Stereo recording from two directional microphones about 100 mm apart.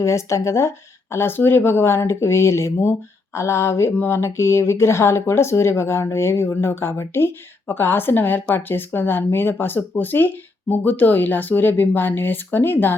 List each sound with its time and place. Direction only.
0.0 s speech: 30° left (ahead or behind)